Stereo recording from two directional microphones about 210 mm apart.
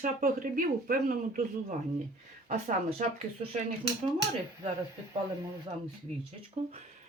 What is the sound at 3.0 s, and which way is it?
Speech, 35° right (ahead or behind).